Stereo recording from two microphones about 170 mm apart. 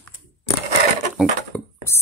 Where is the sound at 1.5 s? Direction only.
15° left (ahead or behind).